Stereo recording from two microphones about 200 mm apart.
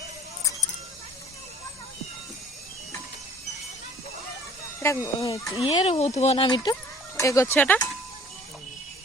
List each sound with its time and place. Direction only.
4.8 s speech: 15° left (ahead or behind)